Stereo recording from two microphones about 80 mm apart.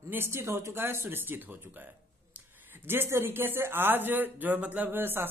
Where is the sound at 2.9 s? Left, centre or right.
Right.